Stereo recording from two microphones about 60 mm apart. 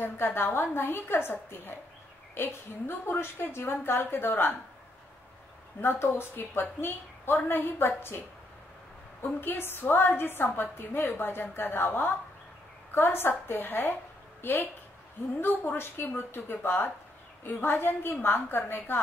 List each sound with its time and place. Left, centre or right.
0.0 s a woman's voice: left
5.8 s a woman's voice: left
9.2 s a woman's voice: left